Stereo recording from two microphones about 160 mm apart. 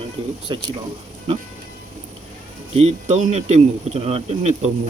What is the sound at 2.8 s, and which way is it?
Speech, 45° right (ahead or behind).